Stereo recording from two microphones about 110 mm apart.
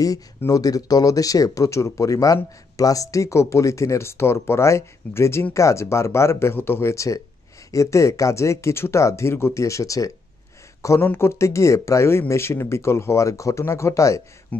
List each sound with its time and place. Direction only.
0.5 s speech: 35° left (ahead or behind)
11.0 s speech: 20° left (ahead or behind)
14.5 s speech: 15° left (ahead or behind)